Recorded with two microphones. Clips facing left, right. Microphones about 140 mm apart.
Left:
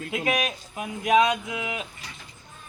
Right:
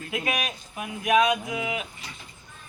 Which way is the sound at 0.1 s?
25° left (ahead or behind).